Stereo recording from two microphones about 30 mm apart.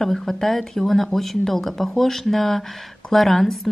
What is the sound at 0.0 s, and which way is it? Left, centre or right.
A woman's voice, centre.